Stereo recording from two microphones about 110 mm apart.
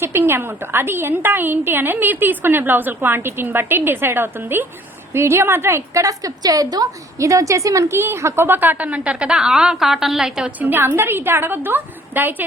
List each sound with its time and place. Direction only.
0.0 s a woman's voice: 20° right (ahead or behind)